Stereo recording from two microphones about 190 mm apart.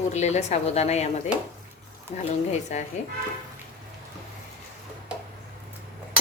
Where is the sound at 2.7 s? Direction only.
35° left (ahead or behind).